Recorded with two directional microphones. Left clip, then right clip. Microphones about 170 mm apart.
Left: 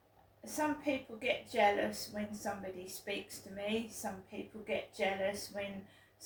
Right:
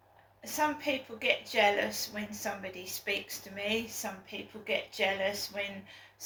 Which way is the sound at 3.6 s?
15° left (ahead or behind).